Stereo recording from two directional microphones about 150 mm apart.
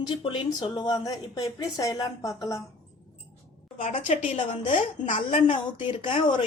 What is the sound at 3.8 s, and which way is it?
Speech, 55° left (ahead or behind).